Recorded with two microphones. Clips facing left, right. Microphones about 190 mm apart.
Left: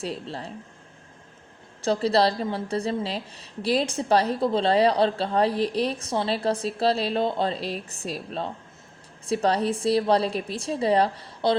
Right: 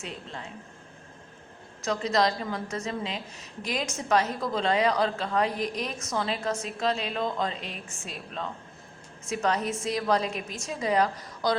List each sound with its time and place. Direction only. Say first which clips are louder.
0.0 s a woman's voice: left 7 dB; 35° left (ahead or behind)
1.8 s a woman's voice: left 4 dB; 35° left (ahead or behind)